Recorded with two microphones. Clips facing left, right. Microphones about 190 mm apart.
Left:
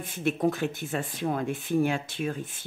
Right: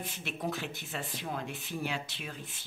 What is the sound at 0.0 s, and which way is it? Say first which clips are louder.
Speech: left 11 dB; 50° left (ahead or behind).